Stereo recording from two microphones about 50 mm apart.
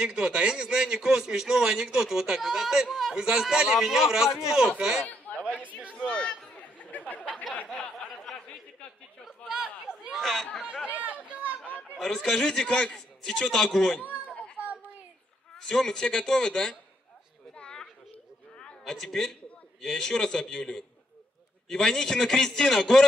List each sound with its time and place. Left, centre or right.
0.0 s a man's voice: centre
5.4 s speech: right
5.9 s run: centre
6.5 s chatter: left
8.3 s a sound: centre
9.5 s chatter: centre
10.1 s speech: centre
10.9 s chatter: right
12.0 s a man's voice: centre
15.5 s a man's voice: centre
17.6 s children playing: centre
18.6 s a sound: centre
19.9 s a man's voice: centre